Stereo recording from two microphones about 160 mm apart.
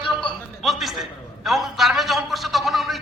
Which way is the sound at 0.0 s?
30° left (ahead or behind).